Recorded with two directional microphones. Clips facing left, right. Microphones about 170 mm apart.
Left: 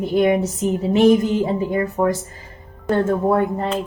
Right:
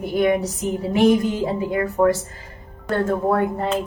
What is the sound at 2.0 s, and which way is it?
Speech, 10° left (ahead or behind).